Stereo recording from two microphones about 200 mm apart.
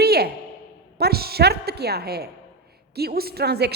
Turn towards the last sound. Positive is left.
turn(degrees=-55)  # may be behind; listen again after turning